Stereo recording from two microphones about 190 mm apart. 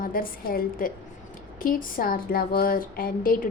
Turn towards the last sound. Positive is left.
turn(degrees=50)  # may be behind; listen again after turning